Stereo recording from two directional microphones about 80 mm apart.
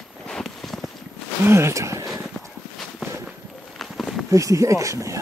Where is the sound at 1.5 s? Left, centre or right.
Right.